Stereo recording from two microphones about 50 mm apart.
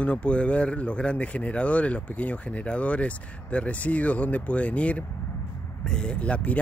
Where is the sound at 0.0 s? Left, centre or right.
Left.